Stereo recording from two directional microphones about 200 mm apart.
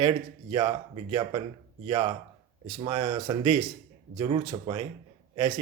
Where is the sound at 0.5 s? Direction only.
25° right (ahead or behind).